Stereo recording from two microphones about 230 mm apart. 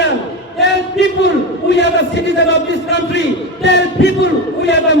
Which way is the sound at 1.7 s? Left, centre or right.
Left.